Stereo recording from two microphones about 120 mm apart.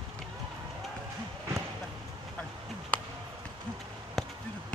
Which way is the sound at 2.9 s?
10° left (ahead or behind).